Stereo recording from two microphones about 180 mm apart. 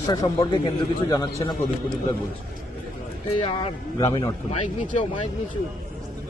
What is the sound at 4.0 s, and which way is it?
Speech, 20° left (ahead or behind).